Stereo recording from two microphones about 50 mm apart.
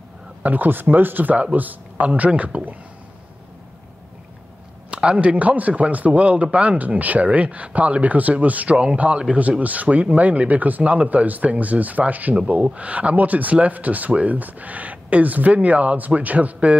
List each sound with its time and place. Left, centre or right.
0.4 s speech: right
4.9 s speech: right